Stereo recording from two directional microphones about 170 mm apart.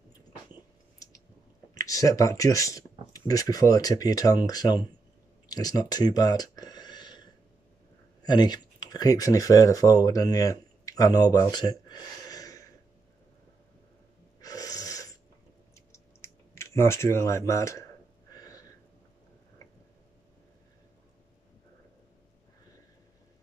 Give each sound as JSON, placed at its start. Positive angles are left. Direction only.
{"t": 1.8, "sound": "speech", "side_deg": 20}
{"t": 5.5, "sound": "a sound", "side_deg": 25}
{"t": 8.3, "sound": "speech", "side_deg": 25}
{"t": 14.4, "sound": "snort", "side_deg": 20}
{"t": 15.7, "sound": "typing", "side_deg": 15}
{"t": 18.3, "sound": "a sound", "side_deg": 20}